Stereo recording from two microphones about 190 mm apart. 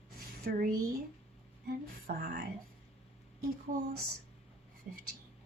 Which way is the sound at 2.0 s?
50° right (ahead or behind).